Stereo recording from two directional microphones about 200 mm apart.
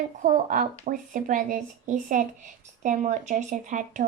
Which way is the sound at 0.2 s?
40° right (ahead or behind).